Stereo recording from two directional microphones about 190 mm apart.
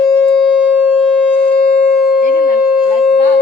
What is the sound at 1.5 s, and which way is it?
Siren, 55° left (ahead or behind).